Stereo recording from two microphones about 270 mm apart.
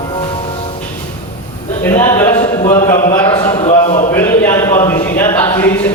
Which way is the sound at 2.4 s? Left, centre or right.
Left.